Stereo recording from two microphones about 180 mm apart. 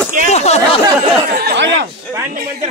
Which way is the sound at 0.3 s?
35° left (ahead or behind).